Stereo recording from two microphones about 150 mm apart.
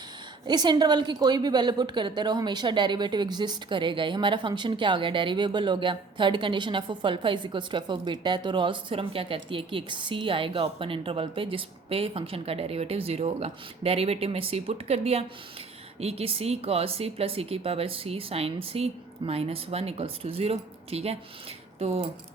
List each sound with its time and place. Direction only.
0.4 s a woman's voice: 30° right (ahead or behind)